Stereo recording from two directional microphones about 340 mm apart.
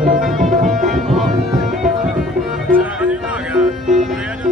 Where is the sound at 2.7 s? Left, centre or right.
Centre.